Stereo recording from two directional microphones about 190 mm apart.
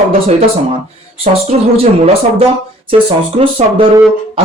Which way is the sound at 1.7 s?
30° right (ahead or behind).